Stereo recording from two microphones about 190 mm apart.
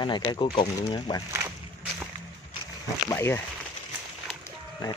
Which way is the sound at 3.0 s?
10° left (ahead or behind).